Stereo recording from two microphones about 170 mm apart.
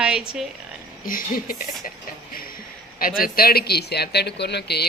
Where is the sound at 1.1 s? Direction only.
55° left (ahead or behind).